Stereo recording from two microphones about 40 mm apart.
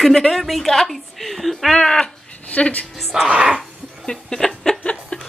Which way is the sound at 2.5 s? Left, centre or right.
Left.